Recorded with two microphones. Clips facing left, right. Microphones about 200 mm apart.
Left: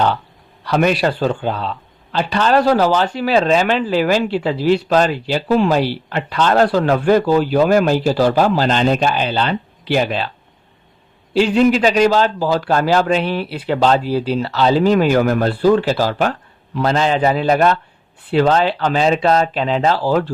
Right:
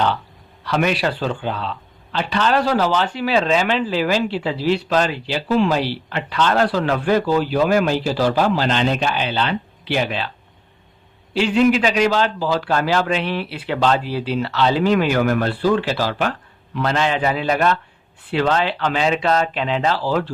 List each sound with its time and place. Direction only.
0.6 s speech: 45° left (ahead or behind)
11.5 s a man's voice: 40° left (ahead or behind)